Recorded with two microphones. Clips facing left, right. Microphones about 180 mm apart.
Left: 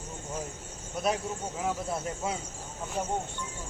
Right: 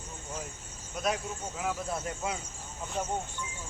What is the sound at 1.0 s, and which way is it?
Speech, 30° left (ahead or behind).